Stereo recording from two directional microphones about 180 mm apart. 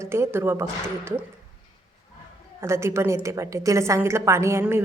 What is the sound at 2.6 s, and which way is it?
A woman's voice, 15° right (ahead or behind).